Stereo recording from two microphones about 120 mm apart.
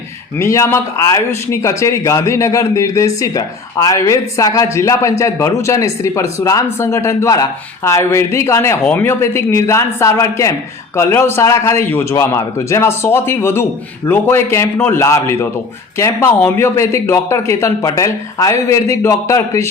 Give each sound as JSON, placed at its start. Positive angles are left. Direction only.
{"t": 0.3, "sound": "speech", "side_deg": 25}